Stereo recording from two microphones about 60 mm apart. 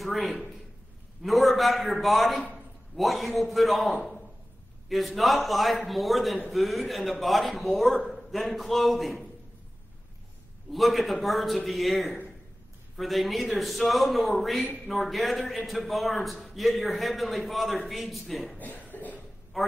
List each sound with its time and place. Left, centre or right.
0.0 s a man's voice: centre
10.7 s a man's voice: centre
18.6 s cough: left
19.6 s speech: centre